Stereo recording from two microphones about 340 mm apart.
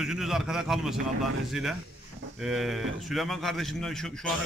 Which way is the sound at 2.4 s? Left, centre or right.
Centre.